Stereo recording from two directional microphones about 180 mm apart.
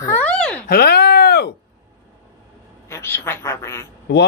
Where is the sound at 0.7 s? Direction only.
60° left (ahead or behind).